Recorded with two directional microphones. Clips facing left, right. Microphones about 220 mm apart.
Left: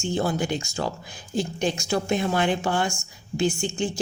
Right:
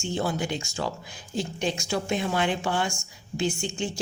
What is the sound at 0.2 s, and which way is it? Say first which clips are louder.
Speech: left 2 dB; 45° left (ahead or behind).